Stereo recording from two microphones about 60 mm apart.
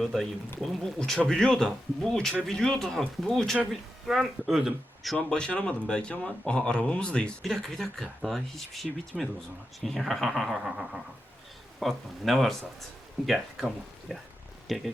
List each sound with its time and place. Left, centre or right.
0.0 s speech: centre
5.3 s speech: centre
7.4 s speech: centre
10.7 s a sound: centre
11.8 s speech: centre